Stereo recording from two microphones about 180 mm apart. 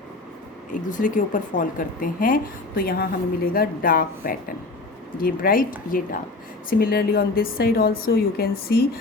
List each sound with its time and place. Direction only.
0.7 s a woman's voice: 45° left (ahead or behind)